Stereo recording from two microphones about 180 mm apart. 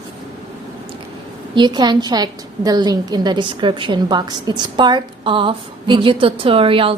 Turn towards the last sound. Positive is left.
turn(degrees=-30)  # may be behind; listen again after turning